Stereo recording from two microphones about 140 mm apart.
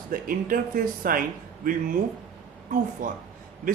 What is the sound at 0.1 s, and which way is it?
Speech, 85° right.